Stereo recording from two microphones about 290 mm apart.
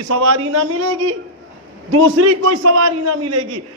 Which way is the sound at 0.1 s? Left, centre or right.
Right.